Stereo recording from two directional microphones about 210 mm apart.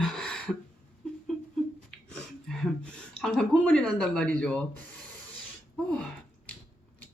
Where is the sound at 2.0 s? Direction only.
5° left (ahead or behind).